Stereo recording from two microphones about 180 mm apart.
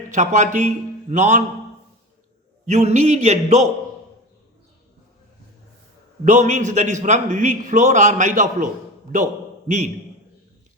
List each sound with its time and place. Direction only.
0.1 s a man's voice: 40° right (ahead or behind)
2.6 s a man's voice: 40° right (ahead or behind)
6.2 s a man's voice: 40° right (ahead or behind)